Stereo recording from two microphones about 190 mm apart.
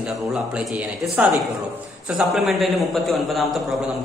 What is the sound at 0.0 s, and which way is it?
A man's voice, 5° right (ahead or behind).